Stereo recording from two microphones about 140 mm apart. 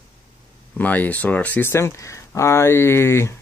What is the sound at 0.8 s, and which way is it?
Speech, 10° left (ahead or behind).